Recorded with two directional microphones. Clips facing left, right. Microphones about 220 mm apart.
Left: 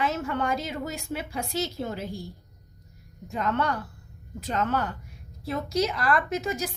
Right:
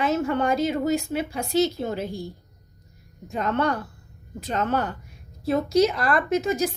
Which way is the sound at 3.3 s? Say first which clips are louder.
Right 3 dB; 25° right (ahead or behind).